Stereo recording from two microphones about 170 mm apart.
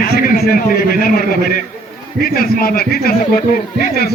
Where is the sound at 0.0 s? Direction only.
60° left (ahead or behind).